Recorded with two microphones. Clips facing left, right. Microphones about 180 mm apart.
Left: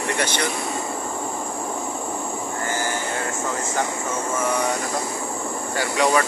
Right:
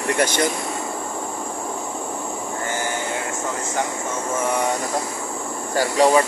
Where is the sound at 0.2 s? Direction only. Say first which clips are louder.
Right 6 dB; 45° right (ahead or behind).